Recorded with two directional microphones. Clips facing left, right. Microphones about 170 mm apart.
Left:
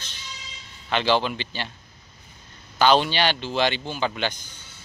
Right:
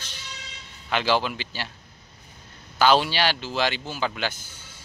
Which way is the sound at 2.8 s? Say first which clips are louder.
Left 1 dB; 5° right (ahead or behind).